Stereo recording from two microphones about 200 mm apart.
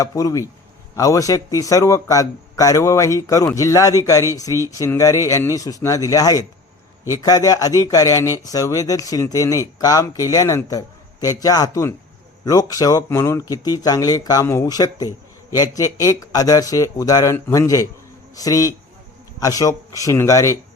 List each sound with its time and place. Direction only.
0.0 s a man's voice: 15° left (ahead or behind)